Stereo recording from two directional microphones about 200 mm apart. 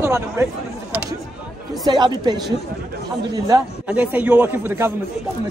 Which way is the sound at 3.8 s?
5° right (ahead or behind).